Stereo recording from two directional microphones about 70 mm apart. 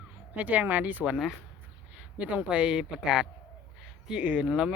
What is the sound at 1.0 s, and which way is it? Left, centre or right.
Speech, centre.